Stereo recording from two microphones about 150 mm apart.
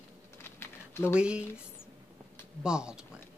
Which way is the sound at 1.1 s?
5° right (ahead or behind).